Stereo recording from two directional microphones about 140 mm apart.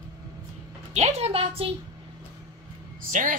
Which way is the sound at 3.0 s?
75° right (ahead or behind).